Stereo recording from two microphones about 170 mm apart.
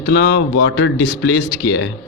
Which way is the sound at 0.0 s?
90° left.